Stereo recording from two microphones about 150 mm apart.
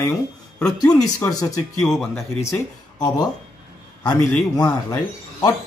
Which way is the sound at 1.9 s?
Centre (ahead or behind).